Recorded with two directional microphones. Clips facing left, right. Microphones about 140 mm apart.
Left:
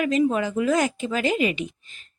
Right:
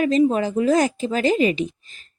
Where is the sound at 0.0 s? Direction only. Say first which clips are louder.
Right 3 dB; 35° right (ahead or behind).